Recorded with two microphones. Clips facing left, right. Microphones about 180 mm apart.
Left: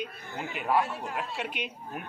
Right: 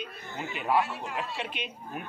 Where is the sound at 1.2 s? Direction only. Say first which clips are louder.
Even; centre (ahead or behind).